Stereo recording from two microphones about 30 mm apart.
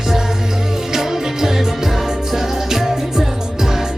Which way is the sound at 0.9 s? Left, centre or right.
Centre.